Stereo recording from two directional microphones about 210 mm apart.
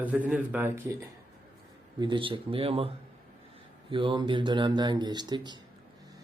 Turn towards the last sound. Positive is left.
turn(degrees=-20)  # may be behind; listen again after turning